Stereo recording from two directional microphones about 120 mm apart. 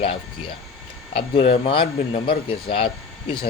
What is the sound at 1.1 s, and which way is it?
Speech, 45° left (ahead or behind).